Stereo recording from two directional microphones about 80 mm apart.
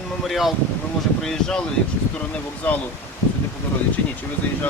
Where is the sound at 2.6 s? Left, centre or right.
Centre.